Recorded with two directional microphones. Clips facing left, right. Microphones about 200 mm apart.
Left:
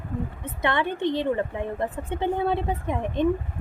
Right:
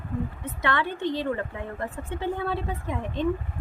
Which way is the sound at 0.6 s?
20° left (ahead or behind).